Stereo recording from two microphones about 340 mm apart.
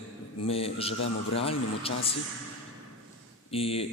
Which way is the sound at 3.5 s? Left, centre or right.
Centre.